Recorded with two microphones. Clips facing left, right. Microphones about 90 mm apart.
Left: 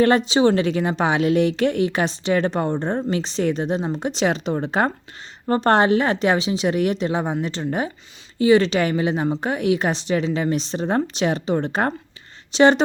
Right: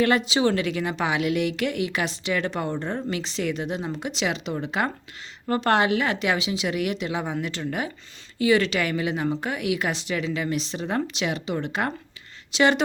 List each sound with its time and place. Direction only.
0.0 s a woman's voice: 35° left (ahead or behind)